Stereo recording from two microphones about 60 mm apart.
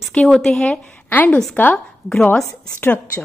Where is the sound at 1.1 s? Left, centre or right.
Left.